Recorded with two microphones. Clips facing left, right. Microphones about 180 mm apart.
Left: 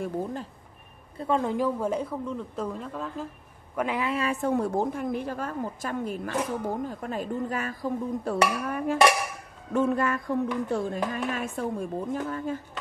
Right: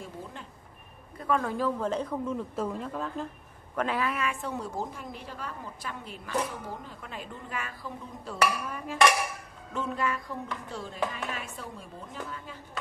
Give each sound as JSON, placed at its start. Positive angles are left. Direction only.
{"t": 1.1, "sound": "a woman's voice", "side_deg": 25}
{"t": 2.2, "sound": "speech", "side_deg": -5}
{"t": 3.7, "sound": "a woman's voice", "side_deg": 15}
{"t": 4.2, "sound": "a woman's voice", "side_deg": 40}
{"t": 8.6, "sound": "dishes", "side_deg": 55}
{"t": 9.8, "sound": "a woman's voice", "side_deg": 50}